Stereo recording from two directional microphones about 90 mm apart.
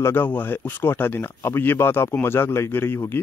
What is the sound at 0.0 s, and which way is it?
Speech, 20° left (ahead or behind).